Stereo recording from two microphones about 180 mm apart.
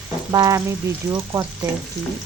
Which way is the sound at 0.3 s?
20° right (ahead or behind).